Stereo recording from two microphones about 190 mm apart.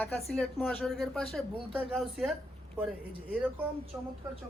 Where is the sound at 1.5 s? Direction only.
30° right (ahead or behind).